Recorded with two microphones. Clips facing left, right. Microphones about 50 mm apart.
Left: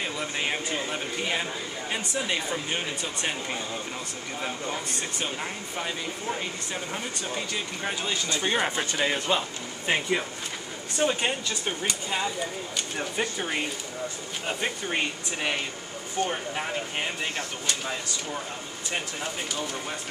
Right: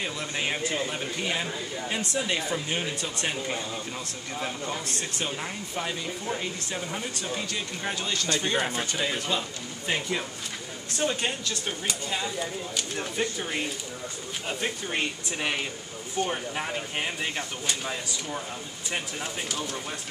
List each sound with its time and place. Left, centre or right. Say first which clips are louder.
0.0 s speech: left 1 dB; centre
4.6 s speech: left 1 dB; centre